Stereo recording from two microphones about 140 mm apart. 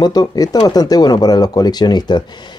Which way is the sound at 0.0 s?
30° left (ahead or behind).